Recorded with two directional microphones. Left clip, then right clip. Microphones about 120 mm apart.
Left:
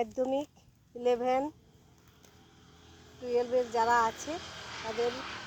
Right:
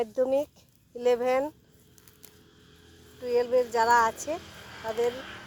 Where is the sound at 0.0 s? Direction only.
5° right (ahead or behind).